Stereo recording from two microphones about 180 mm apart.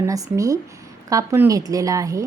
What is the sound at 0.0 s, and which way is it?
A woman's voice, 20° right (ahead or behind).